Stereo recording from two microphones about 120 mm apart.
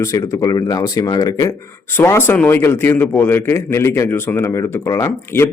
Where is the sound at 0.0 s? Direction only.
30° left (ahead or behind).